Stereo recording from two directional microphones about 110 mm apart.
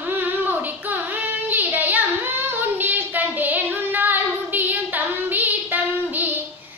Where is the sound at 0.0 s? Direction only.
15° right (ahead or behind).